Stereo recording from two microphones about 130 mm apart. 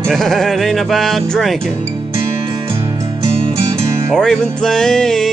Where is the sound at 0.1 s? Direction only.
Centre (ahead or behind).